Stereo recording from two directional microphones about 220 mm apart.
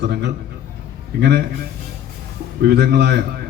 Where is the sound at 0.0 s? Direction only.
50° right (ahead or behind).